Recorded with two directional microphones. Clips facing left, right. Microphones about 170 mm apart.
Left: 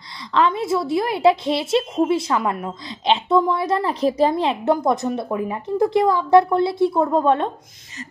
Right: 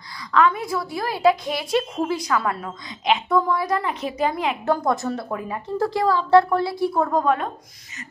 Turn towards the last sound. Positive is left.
turn(degrees=25)  # may be behind; listen again after turning